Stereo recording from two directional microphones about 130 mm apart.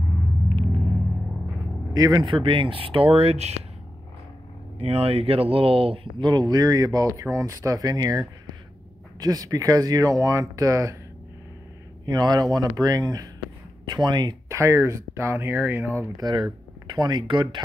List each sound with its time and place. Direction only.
2.0 s speech: 25° right (ahead or behind)
2.3 s speech: 40° right (ahead or behind)
4.7 s speech: 45° right (ahead or behind); by 11.0 s 25° right (ahead or behind)
12.1 s speech: 30° right (ahead or behind)
16.2 s speech: 35° right (ahead or behind)